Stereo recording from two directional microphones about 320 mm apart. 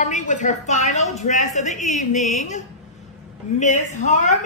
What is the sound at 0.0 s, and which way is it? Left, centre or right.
A woman's voice, left.